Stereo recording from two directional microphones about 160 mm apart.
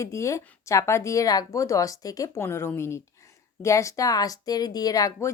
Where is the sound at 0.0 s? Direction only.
20° left (ahead or behind).